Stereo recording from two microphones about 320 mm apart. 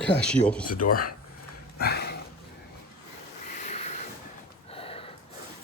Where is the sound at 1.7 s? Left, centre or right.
Left.